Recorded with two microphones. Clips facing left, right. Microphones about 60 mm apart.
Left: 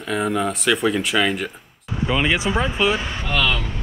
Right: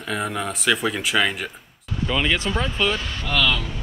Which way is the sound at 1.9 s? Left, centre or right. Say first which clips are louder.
Left 2 dB; centre.